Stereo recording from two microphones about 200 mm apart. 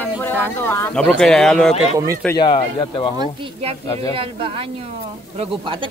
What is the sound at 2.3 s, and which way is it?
Speech, 20° left (ahead or behind).